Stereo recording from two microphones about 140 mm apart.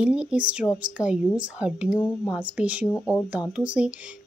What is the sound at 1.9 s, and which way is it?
Speech, 20° left (ahead or behind).